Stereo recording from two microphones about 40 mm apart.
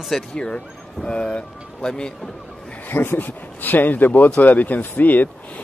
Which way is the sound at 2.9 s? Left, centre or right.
Left.